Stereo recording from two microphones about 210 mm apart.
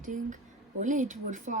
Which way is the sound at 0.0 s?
40° right (ahead or behind).